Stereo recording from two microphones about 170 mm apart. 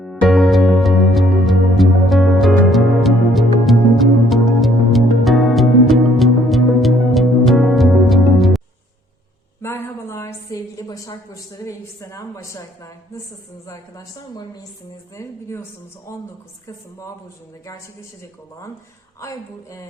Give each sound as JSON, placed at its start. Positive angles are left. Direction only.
{"t": 0.0, "sound": "music", "side_deg": 0}
{"t": 9.6, "sound": "a sound", "side_deg": 15}
{"t": 13.7, "sound": "a woman's voice", "side_deg": 20}
{"t": 19.2, "sound": "speech", "side_deg": 20}